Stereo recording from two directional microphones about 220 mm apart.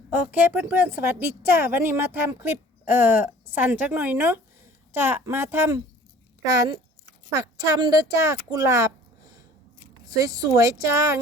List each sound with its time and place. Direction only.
0.1 s a woman's voice: 10° right (ahead or behind)